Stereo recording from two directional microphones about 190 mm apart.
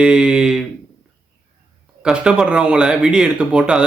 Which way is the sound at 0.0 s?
5° right (ahead or behind).